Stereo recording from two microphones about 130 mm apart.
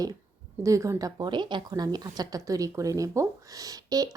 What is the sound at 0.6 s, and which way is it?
Speech, 25° right (ahead or behind).